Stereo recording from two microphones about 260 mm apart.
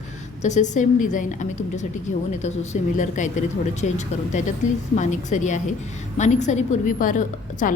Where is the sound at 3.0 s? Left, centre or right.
Left.